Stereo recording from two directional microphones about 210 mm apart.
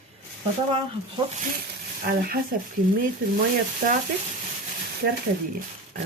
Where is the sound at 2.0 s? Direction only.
45° right (ahead or behind).